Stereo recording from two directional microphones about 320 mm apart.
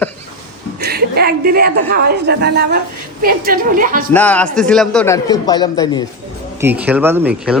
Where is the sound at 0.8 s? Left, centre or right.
Right.